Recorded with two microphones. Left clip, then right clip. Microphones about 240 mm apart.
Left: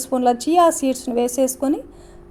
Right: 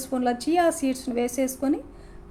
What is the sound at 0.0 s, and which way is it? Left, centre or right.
A woman's voice, left.